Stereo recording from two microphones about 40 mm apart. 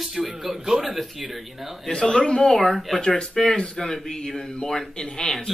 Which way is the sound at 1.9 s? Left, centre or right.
Centre.